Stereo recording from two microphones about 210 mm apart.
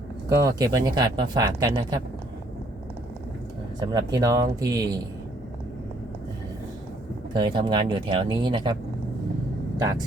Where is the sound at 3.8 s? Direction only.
15° right (ahead or behind).